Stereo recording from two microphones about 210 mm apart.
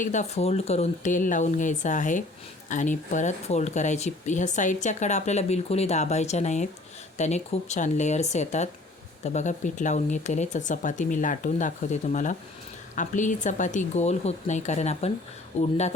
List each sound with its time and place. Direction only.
0.0 s speech: 35° left (ahead or behind)